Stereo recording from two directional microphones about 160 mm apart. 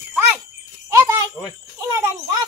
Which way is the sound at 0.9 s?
20° right (ahead or behind).